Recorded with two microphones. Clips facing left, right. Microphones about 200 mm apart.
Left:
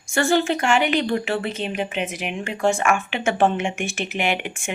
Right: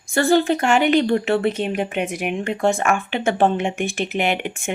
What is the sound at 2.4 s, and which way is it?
Speech, 35° right (ahead or behind).